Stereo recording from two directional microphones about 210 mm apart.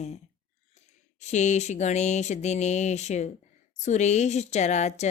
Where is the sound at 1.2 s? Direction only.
35° left (ahead or behind).